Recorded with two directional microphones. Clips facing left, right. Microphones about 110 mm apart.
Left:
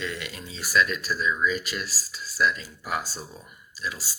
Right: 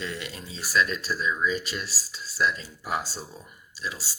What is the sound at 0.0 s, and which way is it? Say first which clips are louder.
Speech: left 1 dB; 30° right (ahead or behind).